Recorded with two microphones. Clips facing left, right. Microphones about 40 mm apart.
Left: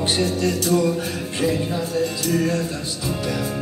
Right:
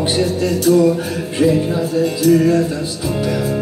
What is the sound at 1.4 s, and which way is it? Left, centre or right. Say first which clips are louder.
Speech: right 7 dB; centre.